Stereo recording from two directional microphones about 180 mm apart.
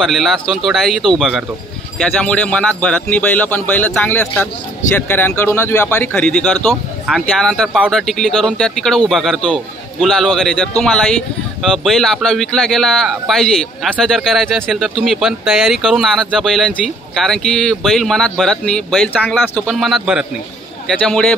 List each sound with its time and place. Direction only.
0.0 s speech: centre (ahead or behind)